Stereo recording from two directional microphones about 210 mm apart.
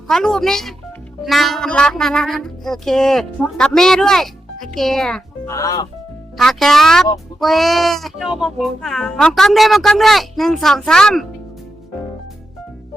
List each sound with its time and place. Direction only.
0.1 s speech: centre (ahead or behind)
5.5 s speech: 15° left (ahead or behind)
6.3 s speech: centre (ahead or behind)